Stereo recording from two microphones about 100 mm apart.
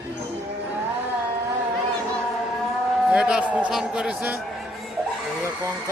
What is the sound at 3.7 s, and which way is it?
Speech, 5° right (ahead or behind).